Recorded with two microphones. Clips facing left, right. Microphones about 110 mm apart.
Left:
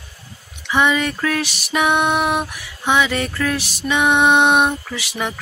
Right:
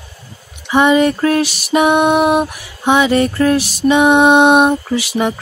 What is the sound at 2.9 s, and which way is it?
Music, 35° right (ahead or behind).